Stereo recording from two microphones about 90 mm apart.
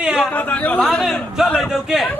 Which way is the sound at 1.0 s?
Centre (ahead or behind).